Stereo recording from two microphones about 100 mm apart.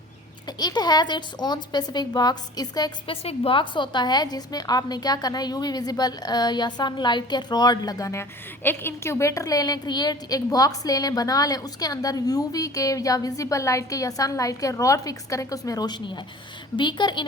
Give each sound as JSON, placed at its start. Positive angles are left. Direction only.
{"t": 0.4, "sound": "a woman's voice", "side_deg": 45}
{"t": 3.1, "sound": "a woman's voice", "side_deg": 70}